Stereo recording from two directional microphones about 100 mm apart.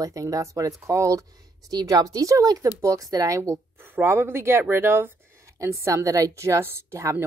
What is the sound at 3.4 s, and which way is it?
A woman's voice, 25° right (ahead or behind).